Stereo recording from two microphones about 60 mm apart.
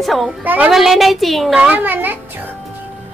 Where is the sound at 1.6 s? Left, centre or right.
Right.